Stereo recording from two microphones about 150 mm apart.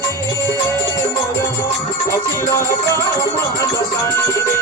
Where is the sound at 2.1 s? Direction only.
20° left (ahead or behind).